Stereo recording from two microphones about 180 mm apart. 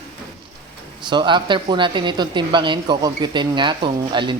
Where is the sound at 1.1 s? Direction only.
25° right (ahead or behind).